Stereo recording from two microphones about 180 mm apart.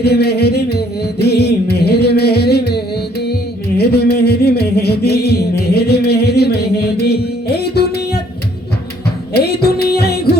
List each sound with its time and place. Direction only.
0.0 s music: 65° left (ahead or behind)
9.3 s music: 60° left (ahead or behind)